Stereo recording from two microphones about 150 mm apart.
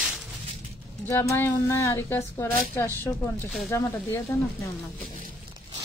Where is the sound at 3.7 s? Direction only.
15° left (ahead or behind).